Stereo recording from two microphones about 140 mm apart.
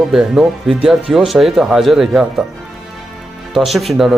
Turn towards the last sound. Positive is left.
turn(degrees=-5)  # may be behind; listen again after turning